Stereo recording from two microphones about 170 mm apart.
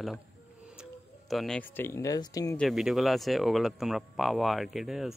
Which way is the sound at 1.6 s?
10° left (ahead or behind).